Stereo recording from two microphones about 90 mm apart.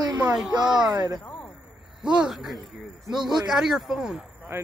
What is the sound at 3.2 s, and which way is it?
Speech, 50° right (ahead or behind).